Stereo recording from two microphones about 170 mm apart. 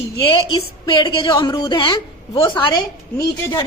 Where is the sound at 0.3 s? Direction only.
30° left (ahead or behind).